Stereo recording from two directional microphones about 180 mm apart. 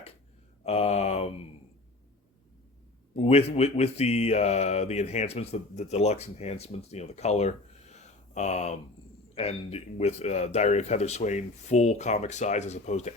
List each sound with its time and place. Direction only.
0.6 s speech: 35° left (ahead or behind)
3.2 s speech: 35° left (ahead or behind)